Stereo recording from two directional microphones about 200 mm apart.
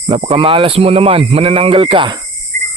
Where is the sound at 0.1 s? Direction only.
30° right (ahead or behind).